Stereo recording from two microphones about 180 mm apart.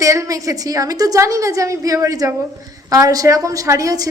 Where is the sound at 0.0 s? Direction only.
15° right (ahead or behind).